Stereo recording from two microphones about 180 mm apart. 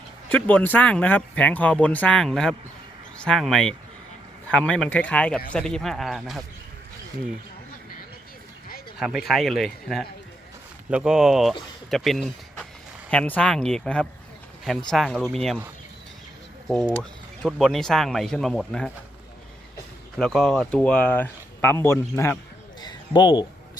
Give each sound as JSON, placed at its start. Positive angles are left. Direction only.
{"t": 0.3, "sound": "speech", "side_deg": 10}
{"t": 9.0, "sound": "speech", "side_deg": 0}
{"t": 16.6, "sound": "speech", "side_deg": 0}
{"t": 20.1, "sound": "speech", "side_deg": 5}
{"t": 22.8, "sound": "a sound", "side_deg": 25}